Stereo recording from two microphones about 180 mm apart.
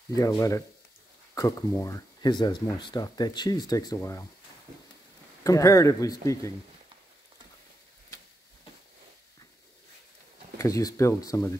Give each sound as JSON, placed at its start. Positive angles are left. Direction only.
{"t": 0.1, "sound": "speech", "side_deg": 20}
{"t": 5.4, "sound": "speech", "side_deg": 20}
{"t": 10.6, "sound": "speech", "side_deg": 20}